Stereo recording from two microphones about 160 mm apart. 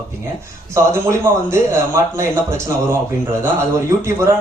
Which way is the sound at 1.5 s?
15° right (ahead or behind).